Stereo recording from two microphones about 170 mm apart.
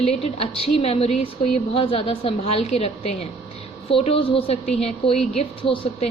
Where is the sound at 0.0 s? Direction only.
35° left (ahead or behind).